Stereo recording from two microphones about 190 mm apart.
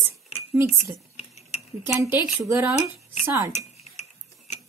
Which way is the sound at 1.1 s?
35° left (ahead or behind).